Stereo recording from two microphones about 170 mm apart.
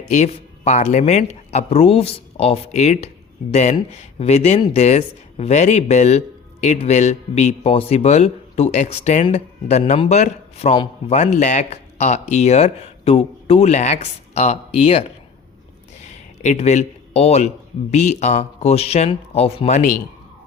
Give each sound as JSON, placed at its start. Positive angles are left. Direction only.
{"t": 0.2, "sound": "a man's voice", "side_deg": 40}
{"t": 16.4, "sound": "a man's voice", "side_deg": 40}